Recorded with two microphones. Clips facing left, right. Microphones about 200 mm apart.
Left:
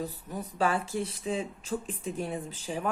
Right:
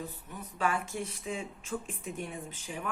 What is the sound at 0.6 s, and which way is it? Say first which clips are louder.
Speech: left 4 dB; 35° left (ahead or behind).